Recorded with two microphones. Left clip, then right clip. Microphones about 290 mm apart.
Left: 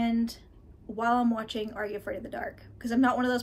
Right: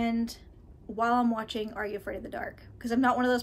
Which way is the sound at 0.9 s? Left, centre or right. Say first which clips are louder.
Even; centre.